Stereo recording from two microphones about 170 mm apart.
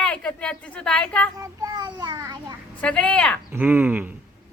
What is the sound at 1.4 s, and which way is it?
A child's voice, 20° right (ahead or behind).